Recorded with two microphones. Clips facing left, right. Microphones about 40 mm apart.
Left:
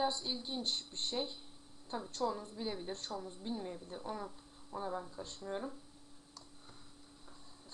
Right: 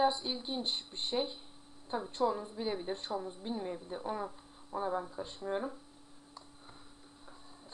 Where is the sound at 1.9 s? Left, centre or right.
Right.